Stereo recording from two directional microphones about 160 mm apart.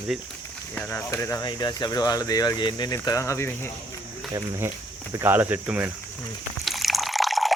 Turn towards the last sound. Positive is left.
turn(degrees=0)  # may be behind; listen again after turning